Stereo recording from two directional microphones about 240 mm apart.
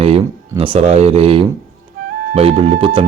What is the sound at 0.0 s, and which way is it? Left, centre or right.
Speech, right.